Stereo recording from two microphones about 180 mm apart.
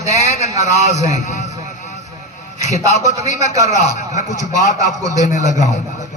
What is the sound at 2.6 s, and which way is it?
Speech, 40° left (ahead or behind).